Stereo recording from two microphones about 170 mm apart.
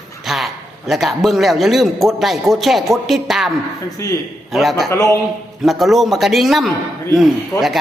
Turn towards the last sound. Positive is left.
turn(degrees=0)  # may be behind; listen again after turning